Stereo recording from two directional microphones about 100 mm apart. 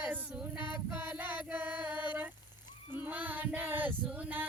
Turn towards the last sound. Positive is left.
turn(degrees=-15)  # may be behind; listen again after turning